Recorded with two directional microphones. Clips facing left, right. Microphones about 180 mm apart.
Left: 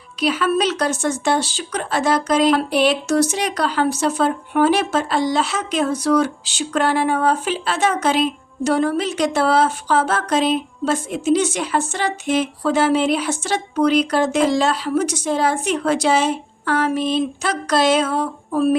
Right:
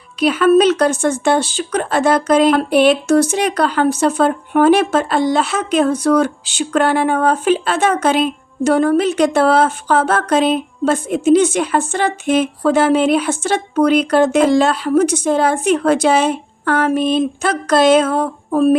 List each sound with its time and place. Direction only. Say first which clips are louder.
0.2 s speech: right 7 dB; 55° right (ahead or behind)